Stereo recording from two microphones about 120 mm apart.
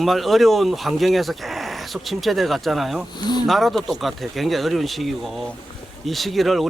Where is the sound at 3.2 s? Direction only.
35° left (ahead or behind).